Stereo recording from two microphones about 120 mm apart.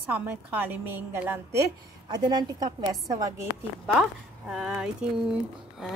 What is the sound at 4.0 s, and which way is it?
Speech, 5° right (ahead or behind).